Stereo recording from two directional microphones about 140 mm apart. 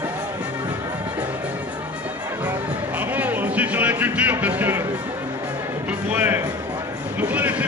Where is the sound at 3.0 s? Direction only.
10° right (ahead or behind).